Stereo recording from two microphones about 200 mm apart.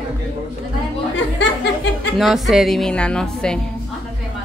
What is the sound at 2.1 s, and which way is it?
A woman's voice, centre (ahead or behind).